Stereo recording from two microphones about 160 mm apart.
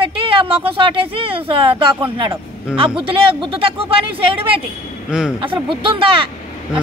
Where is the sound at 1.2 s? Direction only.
35° right (ahead or behind).